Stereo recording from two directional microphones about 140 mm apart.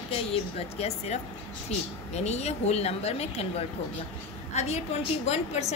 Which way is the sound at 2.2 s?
50° left (ahead or behind).